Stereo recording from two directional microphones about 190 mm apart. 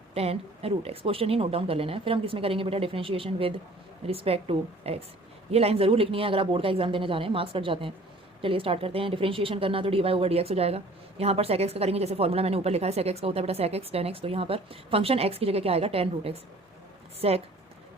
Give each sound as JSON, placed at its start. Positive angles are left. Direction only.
{"t": 0.1, "sound": "speech", "side_deg": -30}